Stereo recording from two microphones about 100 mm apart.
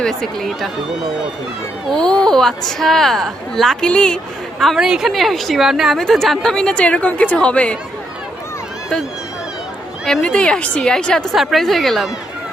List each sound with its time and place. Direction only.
0.0 s a woman's voice: 5° left (ahead or behind)
4.6 s a woman's voice: centre (ahead or behind)
10.1 s a woman's voice: 10° left (ahead or behind)